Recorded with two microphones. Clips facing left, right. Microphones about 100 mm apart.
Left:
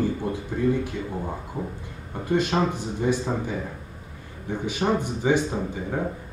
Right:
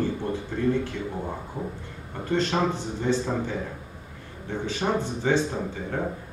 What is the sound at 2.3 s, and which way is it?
Speech, 15° left (ahead or behind).